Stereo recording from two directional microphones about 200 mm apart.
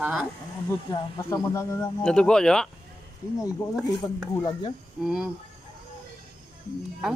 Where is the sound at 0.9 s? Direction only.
15° left (ahead or behind).